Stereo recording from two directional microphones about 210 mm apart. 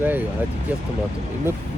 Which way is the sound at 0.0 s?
10° right (ahead or behind).